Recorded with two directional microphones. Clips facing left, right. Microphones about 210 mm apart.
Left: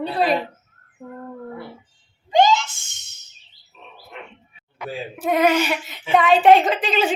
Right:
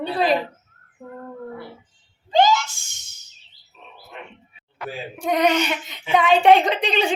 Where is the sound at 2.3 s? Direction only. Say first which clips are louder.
Left 1 dB; 20° left (ahead or behind).